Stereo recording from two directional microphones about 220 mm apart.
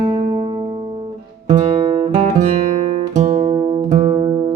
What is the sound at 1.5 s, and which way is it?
Music, 25° right (ahead or behind).